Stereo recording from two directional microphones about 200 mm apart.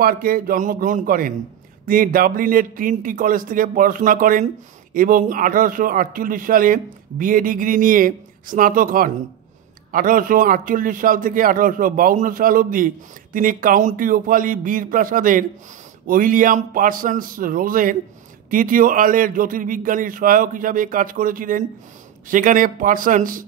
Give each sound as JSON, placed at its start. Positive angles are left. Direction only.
{"t": 0.0, "sound": "a man's voice", "side_deg": -45}